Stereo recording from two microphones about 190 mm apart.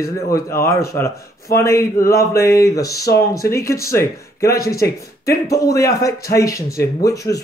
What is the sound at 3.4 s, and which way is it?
Speech, 50° left (ahead or behind).